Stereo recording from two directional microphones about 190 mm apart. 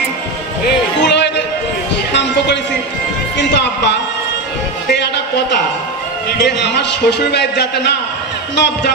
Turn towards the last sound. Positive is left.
turn(degrees=60)  # may be behind; listen again after turning